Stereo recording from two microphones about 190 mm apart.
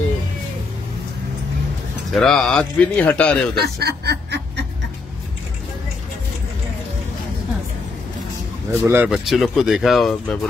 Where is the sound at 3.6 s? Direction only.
60° right (ahead or behind).